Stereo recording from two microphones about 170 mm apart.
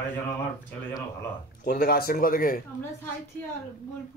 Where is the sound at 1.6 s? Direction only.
60° left (ahead or behind).